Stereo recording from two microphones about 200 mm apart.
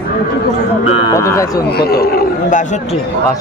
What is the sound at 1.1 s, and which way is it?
Speech, 15° left (ahead or behind).